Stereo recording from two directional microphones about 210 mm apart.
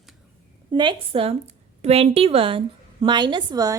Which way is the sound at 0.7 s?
20° right (ahead or behind).